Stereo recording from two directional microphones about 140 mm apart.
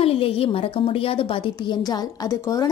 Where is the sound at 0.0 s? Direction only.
45° left (ahead or behind).